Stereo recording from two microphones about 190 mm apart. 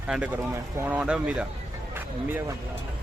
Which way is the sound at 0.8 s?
10° right (ahead or behind).